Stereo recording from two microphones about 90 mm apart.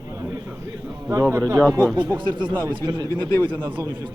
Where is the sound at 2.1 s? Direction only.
55° right (ahead or behind).